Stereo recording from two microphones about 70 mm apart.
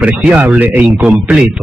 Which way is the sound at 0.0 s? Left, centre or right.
Centre.